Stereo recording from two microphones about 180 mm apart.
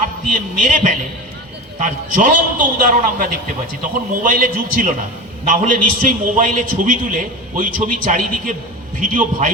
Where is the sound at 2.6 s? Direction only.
50° right (ahead or behind).